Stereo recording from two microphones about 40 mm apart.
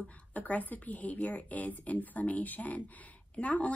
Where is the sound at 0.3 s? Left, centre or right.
Left.